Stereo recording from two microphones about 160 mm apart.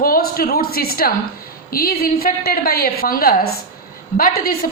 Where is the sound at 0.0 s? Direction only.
65° left (ahead or behind).